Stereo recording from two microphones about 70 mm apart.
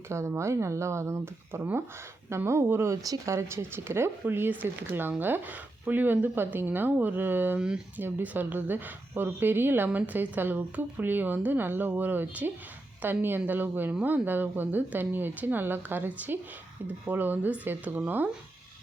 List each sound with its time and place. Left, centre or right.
0.1 s speech: right
2.9 s speech: right
3.3 s a woman's voice: right